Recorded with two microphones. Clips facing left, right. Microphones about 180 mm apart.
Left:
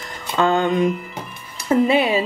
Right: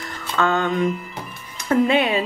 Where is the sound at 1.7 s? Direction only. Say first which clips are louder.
Left 1 dB; 5° left (ahead or behind).